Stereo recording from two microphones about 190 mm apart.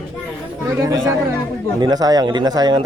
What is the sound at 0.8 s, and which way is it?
Speech, 15° right (ahead or behind).